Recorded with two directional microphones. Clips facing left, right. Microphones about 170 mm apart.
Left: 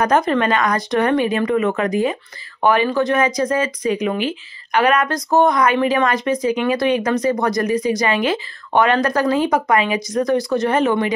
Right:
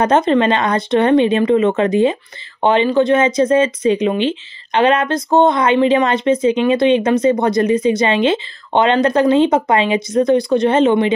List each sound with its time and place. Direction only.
0.0 s speech: 25° right (ahead or behind)